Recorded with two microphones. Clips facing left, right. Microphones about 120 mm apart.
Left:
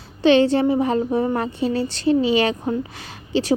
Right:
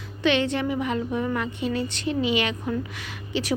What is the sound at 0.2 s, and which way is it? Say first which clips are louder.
A woman's voice: left 8 dB; 35° left (ahead or behind).